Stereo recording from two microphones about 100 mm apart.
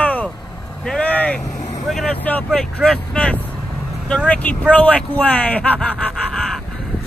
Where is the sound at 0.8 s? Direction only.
10° left (ahead or behind).